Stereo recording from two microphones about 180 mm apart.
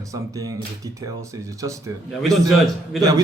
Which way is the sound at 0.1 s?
20° right (ahead or behind).